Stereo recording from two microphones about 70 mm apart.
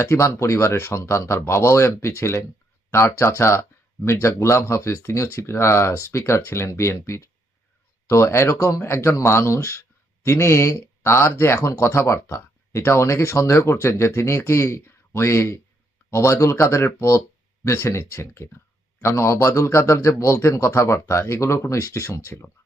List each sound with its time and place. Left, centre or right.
0.0 s speech: left